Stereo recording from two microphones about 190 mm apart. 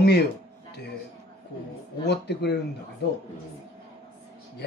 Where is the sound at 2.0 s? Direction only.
60° left (ahead or behind).